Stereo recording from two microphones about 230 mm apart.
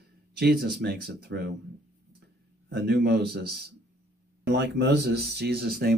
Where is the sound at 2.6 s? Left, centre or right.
Right.